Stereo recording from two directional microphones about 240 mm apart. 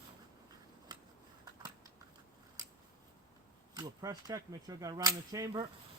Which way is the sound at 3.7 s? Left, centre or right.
Centre.